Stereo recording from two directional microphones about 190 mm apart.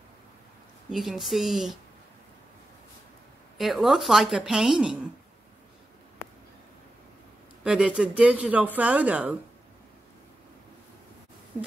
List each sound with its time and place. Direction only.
0.8 s a woman's voice: centre (ahead or behind)
3.5 s a woman's voice: centre (ahead or behind)
7.6 s speech: 5° right (ahead or behind)